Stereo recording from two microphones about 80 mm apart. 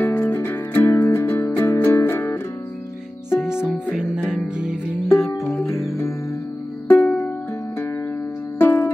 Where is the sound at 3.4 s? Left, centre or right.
Centre.